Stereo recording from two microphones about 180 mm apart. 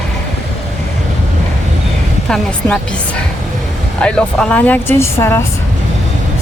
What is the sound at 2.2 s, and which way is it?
A woman's voice, 5° left (ahead or behind).